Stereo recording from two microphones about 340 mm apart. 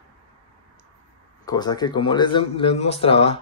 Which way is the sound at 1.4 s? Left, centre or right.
Centre.